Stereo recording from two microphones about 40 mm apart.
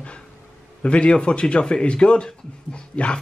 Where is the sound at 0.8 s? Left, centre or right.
Left.